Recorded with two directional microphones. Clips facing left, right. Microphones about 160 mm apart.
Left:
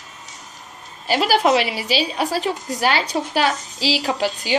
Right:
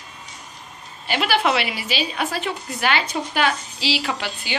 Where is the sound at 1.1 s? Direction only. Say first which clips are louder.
Left 4 dB; 40° left (ahead or behind).